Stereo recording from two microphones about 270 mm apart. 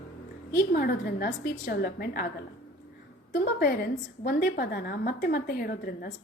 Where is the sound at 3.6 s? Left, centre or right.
Left.